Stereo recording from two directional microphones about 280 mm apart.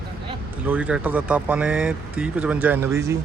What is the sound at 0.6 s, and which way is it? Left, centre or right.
Speech, centre.